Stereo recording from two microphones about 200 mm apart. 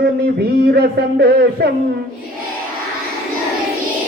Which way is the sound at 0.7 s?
50° right (ahead or behind).